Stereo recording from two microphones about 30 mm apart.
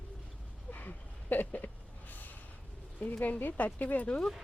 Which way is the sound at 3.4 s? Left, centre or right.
Left.